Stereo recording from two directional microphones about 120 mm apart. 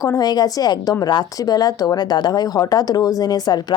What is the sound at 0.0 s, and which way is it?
Speech, 30° left (ahead or behind).